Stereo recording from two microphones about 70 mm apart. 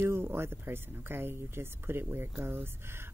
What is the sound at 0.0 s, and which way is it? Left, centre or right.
Speech, right.